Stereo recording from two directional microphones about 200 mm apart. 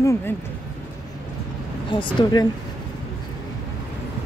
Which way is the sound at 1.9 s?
25° left (ahead or behind).